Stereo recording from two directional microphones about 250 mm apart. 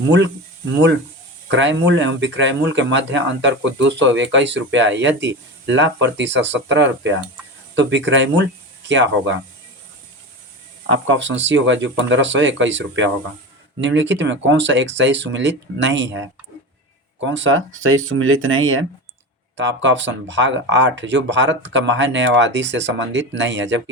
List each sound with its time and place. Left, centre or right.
1.5 s speech: right
10.8 s speech: right